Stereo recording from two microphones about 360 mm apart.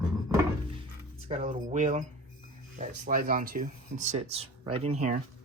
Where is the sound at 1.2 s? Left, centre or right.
Centre.